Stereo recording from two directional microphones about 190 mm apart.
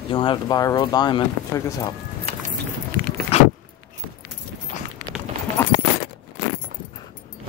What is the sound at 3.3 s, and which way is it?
Keys jangling, 30° left (ahead or behind).